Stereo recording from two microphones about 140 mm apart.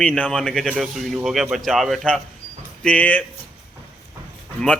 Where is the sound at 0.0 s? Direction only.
5° left (ahead or behind).